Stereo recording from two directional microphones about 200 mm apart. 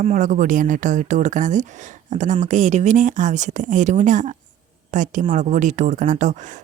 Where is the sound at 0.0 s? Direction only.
35° right (ahead or behind).